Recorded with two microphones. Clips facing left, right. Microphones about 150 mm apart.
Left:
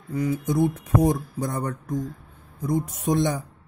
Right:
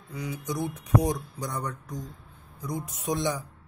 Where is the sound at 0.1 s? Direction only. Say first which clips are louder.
Left 9 dB; 50° left (ahead or behind).